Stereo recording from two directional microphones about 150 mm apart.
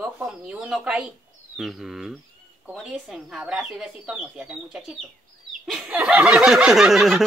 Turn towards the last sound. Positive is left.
turn(degrees=-5)  # may be behind; listen again after turning